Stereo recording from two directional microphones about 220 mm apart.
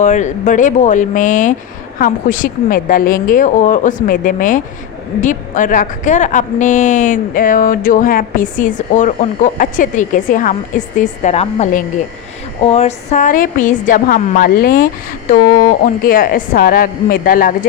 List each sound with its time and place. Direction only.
0.0 s a woman's voice: 35° left (ahead or behind)